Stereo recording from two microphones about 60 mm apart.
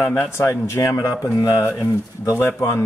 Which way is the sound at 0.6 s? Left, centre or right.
Left.